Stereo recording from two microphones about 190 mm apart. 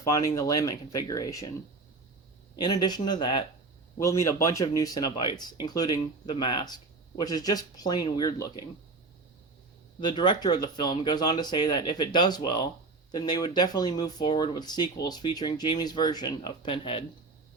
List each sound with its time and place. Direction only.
0.1 s speech: 15° left (ahead or behind)
2.6 s speech: 20° left (ahead or behind)
10.0 s speech: 25° left (ahead or behind)